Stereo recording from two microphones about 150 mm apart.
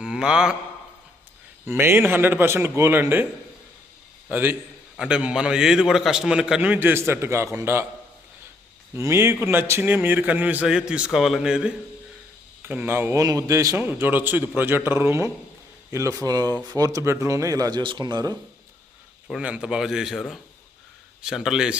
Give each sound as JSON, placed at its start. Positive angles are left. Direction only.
{"t": 0.0, "sound": "a sound", "side_deg": -5}
{"t": 1.7, "sound": "a man's voice", "side_deg": -15}
{"t": 4.3, "sound": "a man's voice", "side_deg": -15}
{"t": 9.0, "sound": "a man's voice", "side_deg": -20}
{"t": 19.3, "sound": "a man's voice", "side_deg": -5}